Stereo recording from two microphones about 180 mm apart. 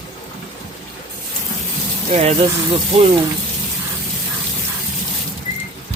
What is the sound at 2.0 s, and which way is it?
Speech, 35° right (ahead or behind).